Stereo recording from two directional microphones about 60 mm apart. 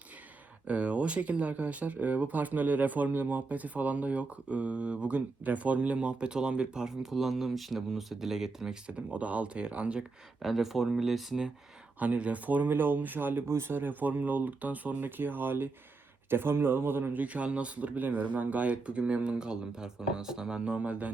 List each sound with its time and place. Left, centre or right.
0.7 s speech: right
8.9 s speech: right
10.4 s speech: centre
11.9 s speech: right
17.2 s speech: right